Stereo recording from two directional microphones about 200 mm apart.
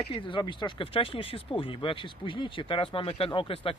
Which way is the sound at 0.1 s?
25° left (ahead or behind).